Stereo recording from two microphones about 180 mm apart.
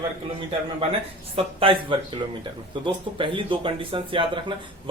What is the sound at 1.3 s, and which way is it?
Speech, 30° right (ahead or behind).